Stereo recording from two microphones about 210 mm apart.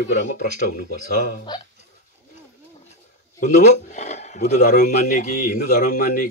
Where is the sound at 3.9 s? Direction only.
35° left (ahead or behind).